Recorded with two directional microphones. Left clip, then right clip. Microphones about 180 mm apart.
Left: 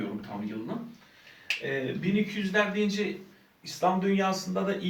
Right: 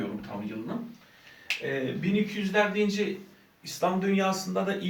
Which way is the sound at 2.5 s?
15° right (ahead or behind).